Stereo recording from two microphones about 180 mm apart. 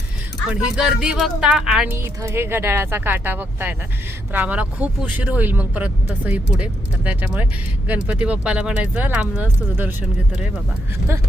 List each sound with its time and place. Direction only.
0.8 s speech: 5° right (ahead or behind)